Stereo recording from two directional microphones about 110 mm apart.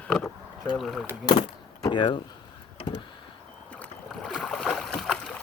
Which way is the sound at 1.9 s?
50° left (ahead or behind).